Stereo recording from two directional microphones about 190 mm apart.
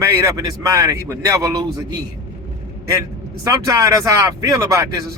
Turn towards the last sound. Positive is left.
turn(degrees=-15)  # may be behind; listen again after turning